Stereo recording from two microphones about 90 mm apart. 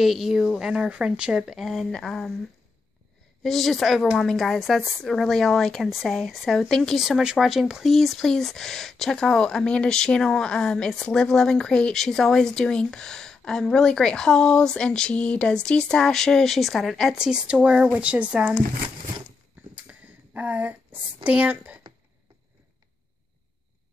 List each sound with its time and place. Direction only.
0.0 s speech: centre (ahead or behind)
3.4 s speech: centre (ahead or behind); by 18.5 s 15° right (ahead or behind)
19.7 s a sound: 20° right (ahead or behind)